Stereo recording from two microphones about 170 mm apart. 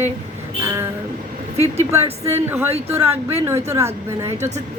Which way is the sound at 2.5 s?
15° right (ahead or behind).